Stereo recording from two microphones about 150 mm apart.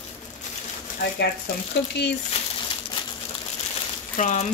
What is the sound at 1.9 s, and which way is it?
Speech, 90° left.